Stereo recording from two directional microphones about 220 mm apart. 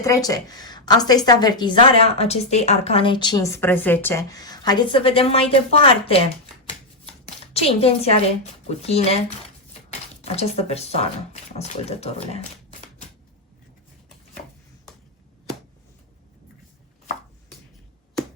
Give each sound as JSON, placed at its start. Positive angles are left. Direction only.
{"t": 0.0, "sound": "a woman's voice", "side_deg": 15}
{"t": 7.5, "sound": "a woman's voice", "side_deg": 25}
{"t": 10.2, "sound": "a woman's voice", "side_deg": 30}